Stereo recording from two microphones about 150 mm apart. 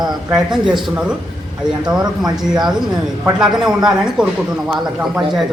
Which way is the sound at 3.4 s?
5° right (ahead or behind).